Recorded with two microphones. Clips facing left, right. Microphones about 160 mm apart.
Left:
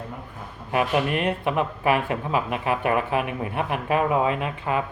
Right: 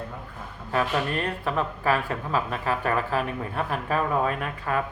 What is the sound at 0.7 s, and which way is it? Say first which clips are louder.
Speech: left 3 dB; 15° left (ahead or behind).